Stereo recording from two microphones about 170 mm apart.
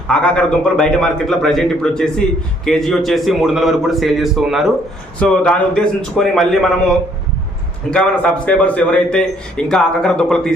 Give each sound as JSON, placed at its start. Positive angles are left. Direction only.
{"t": 0.1, "sound": "a man's voice", "side_deg": 5}